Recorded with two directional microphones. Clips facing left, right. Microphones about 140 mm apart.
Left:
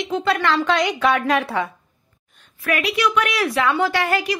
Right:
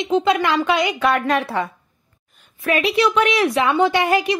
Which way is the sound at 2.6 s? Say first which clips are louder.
Right 3 dB; 25° right (ahead or behind).